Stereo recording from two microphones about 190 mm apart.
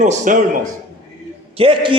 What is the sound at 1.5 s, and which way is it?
Speech, 30° right (ahead or behind).